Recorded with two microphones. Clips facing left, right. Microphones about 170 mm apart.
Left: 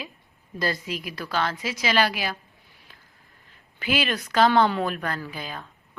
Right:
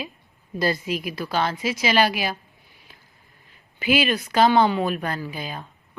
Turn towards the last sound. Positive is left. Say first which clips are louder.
# right 3 dB
turn(degrees=-15)  # may be behind; listen again after turning